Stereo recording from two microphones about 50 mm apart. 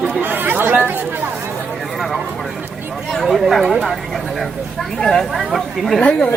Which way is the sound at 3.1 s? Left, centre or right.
Centre.